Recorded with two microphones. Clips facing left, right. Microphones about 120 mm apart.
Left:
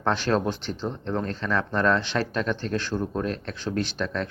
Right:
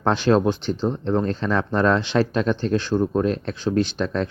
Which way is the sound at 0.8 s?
30° right (ahead or behind).